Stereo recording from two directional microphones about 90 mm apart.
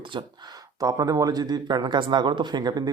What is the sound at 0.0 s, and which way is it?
Speech, 60° right (ahead or behind).